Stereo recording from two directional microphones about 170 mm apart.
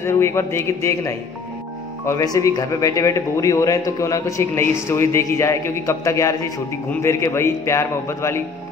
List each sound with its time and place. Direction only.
0.0 s a man's voice: 15° left (ahead or behind)